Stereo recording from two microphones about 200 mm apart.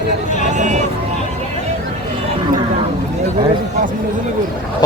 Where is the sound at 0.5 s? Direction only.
35° right (ahead or behind).